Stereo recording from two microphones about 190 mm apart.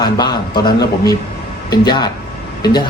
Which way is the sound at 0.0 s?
20° left (ahead or behind).